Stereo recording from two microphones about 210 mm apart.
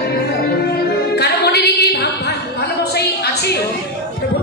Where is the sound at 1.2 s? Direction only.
50° left (ahead or behind).